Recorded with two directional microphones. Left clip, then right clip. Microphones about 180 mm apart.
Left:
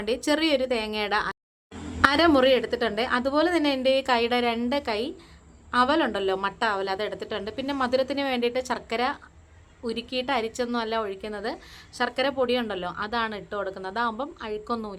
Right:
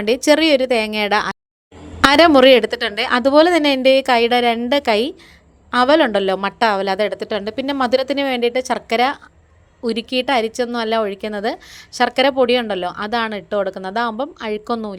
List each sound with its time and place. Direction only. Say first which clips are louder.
0.0 s a woman's voice: right 11 dB; 35° right (ahead or behind)